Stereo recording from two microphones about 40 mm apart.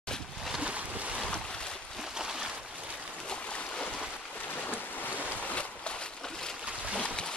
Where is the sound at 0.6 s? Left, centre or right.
Right.